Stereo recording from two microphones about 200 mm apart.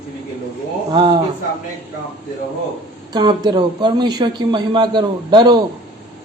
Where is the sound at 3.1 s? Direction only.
20° right (ahead or behind).